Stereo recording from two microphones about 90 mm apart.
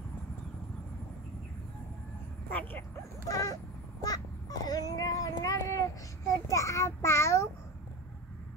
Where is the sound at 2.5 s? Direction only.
20° left (ahead or behind).